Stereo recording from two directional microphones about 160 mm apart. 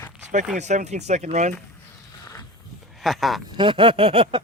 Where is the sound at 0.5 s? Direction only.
45° right (ahead or behind).